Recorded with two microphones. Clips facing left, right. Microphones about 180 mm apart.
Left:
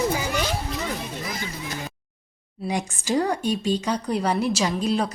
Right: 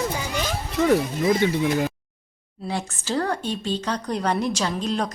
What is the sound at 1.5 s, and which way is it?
Speech, 70° right (ahead or behind).